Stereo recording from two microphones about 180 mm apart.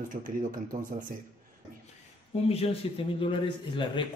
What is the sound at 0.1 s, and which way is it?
Speech, 45° right (ahead or behind).